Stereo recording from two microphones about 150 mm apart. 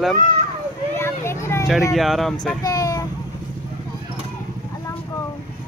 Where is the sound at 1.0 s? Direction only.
15° left (ahead or behind).